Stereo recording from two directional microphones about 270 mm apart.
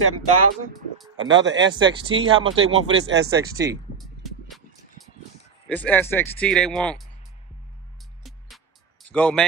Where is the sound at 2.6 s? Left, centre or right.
Right.